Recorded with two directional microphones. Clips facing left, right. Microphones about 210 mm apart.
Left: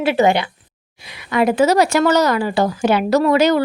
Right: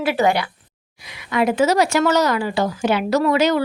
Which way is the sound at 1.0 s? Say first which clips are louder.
Left 3 dB; 35° left (ahead or behind).